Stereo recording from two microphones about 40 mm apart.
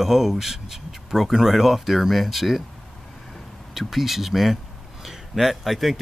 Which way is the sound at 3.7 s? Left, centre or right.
Centre.